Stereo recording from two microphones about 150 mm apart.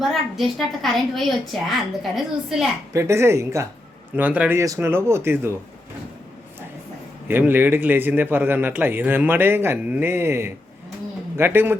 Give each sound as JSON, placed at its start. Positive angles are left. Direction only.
{"t": 0.0, "sound": "a woman's voice", "side_deg": 0}
{"t": 2.9, "sound": "a man's voice", "side_deg": -20}
{"t": 7.3, "sound": "a man's voice", "side_deg": -15}